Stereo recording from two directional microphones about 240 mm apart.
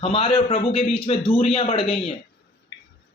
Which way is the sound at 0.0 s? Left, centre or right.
Left.